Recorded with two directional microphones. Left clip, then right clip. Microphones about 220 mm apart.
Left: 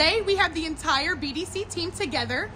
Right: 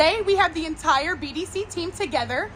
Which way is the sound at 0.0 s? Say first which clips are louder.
Right 3 dB; centre (ahead or behind).